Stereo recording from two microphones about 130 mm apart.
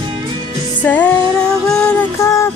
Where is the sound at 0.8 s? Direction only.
10° left (ahead or behind).